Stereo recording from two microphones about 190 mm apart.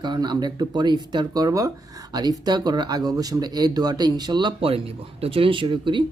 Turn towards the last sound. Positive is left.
turn(degrees=-25)  # may be behind; listen again after turning